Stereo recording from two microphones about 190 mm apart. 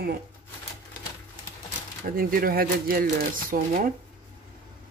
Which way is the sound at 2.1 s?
50° right (ahead or behind).